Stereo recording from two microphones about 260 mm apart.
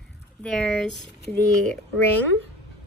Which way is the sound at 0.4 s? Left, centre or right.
Centre.